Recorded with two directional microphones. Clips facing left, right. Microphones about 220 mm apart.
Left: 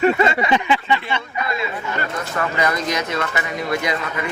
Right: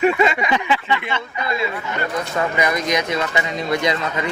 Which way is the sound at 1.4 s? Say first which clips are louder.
Right 2 dB; 25° right (ahead or behind).